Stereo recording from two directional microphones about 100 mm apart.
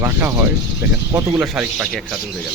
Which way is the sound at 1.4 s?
15° right (ahead or behind).